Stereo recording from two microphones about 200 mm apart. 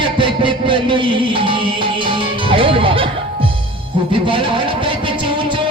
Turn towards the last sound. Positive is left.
turn(degrees=-25)  # may be behind; listen again after turning